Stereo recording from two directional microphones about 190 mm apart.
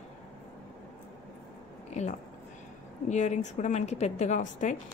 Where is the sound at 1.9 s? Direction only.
35° left (ahead or behind).